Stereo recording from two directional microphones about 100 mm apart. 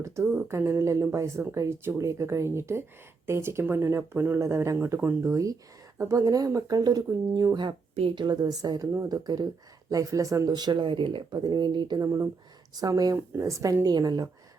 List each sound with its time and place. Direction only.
0.0 s speech: 25° right (ahead or behind)
4.9 s speech: 20° right (ahead or behind)
5.3 s speech: 35° right (ahead or behind)
12.0 s speech: 30° right (ahead or behind)